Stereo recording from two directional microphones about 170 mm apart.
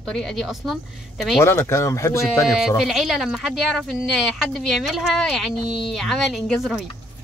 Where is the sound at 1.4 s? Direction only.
15° left (ahead or behind).